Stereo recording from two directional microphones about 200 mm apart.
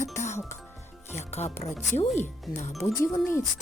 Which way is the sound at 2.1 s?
Centre (ahead or behind).